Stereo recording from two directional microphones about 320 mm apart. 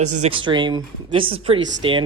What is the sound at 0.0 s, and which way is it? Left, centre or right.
Speech, right.